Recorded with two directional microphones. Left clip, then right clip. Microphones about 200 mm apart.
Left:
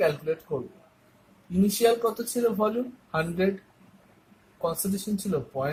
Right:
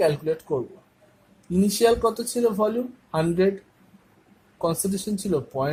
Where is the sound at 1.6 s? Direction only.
50° right (ahead or behind).